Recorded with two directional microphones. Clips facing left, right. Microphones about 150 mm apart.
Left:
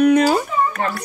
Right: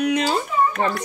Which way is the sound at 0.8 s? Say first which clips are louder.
Right 1 dB; 20° right (ahead or behind).